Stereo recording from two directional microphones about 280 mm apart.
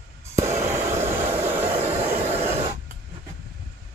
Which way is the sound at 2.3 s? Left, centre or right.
Right.